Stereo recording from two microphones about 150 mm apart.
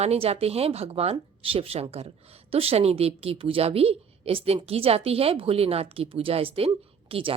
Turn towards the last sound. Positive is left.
turn(degrees=-40)  # may be behind; listen again after turning